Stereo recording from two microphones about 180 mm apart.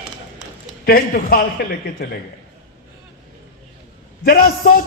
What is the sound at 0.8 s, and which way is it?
A man's voice, 55° left (ahead or behind).